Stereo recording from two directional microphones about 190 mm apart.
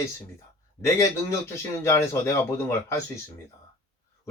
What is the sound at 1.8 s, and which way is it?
Speech, 15° left (ahead or behind).